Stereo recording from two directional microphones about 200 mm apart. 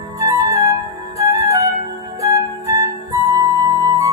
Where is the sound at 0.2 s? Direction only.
15° right (ahead or behind).